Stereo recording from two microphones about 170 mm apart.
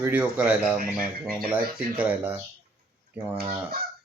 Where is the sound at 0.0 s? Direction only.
10° right (ahead or behind).